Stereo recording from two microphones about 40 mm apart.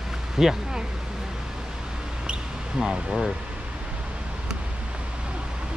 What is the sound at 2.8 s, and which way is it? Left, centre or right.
Speech, centre.